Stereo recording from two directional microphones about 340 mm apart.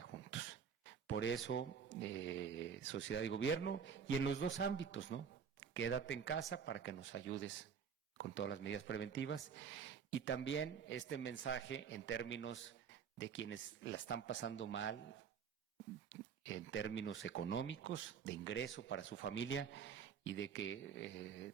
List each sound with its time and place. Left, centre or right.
0.0 s a sound: left
1.5 s speech: left
16.0 s speech: left